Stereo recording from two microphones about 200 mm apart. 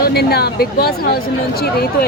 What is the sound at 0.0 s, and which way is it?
Speech, 55° left (ahead or behind).